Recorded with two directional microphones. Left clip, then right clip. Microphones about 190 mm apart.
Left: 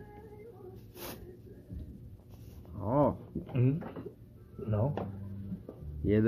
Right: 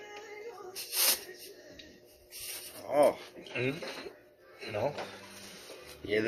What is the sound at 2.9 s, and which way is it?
Speech, 10° right (ahead or behind).